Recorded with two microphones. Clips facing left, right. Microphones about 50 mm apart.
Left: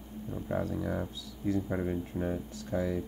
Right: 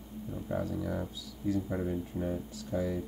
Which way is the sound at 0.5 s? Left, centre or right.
Left.